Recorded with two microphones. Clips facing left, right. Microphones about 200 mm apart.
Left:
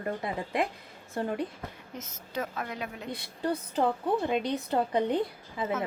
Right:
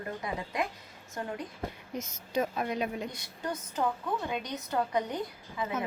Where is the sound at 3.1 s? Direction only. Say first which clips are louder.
Left 6 dB; 35° left (ahead or behind).